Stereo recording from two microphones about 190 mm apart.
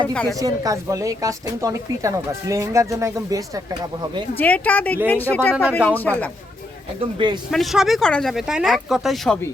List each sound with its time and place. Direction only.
0.1 s speech: 5° left (ahead or behind)
0.3 s speech: 20° right (ahead or behind)
4.4 s speech: 10° left (ahead or behind)
7.0 s a man's voice: 25° right (ahead or behind)
7.5 s speech: centre (ahead or behind)